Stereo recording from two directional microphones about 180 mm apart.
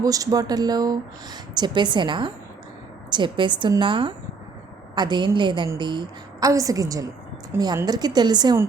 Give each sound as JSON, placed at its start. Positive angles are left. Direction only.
{"t": 0.0, "sound": "speech", "side_deg": -20}